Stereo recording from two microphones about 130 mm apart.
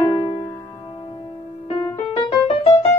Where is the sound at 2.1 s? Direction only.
45° left (ahead or behind).